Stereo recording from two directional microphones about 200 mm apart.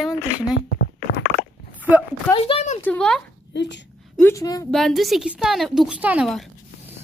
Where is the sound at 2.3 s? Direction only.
25° left (ahead or behind).